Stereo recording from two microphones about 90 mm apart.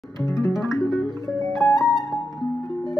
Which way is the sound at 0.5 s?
5° right (ahead or behind).